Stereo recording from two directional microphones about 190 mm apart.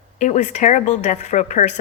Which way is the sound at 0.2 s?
40° left (ahead or behind).